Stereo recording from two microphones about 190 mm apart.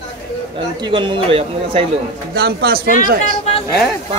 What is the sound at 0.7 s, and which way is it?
Speech, 25° right (ahead or behind).